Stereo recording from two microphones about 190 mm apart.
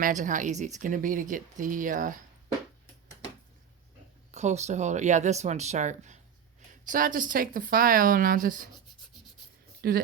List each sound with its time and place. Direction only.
0.0 s speech: 40° right (ahead or behind)
4.3 s speech: 35° right (ahead or behind)
9.8 s speech: 55° right (ahead or behind)